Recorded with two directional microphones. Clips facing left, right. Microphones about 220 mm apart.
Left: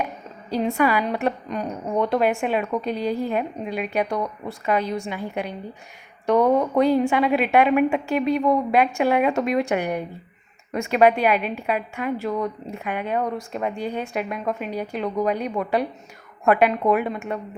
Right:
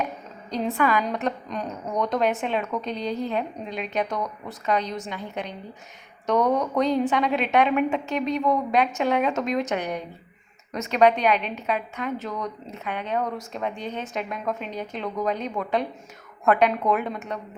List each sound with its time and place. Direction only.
0.5 s a woman's voice: centre (ahead or behind)
0.8 s a woman's voice: 10° left (ahead or behind)